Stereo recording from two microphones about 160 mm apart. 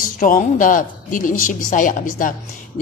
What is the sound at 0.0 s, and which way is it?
Speech, 55° left (ahead or behind).